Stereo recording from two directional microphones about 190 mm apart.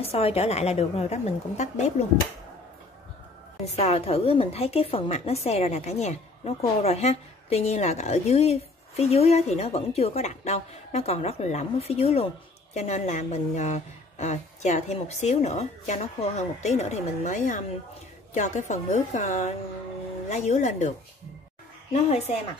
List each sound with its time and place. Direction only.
0.0 s a woman's voice: 30° left (ahead or behind)
3.7 s a woman's voice: 35° left (ahead or behind)
21.9 s a woman's voice: 35° left (ahead or behind)